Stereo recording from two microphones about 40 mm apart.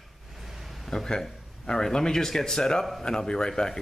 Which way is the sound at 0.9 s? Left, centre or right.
Centre.